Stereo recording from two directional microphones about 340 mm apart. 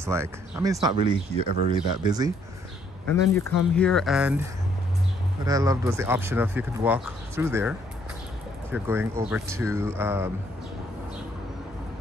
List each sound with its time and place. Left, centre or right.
0.0 s speech: centre
3.1 s speech: centre
5.4 s speech: centre
8.7 s speech: centre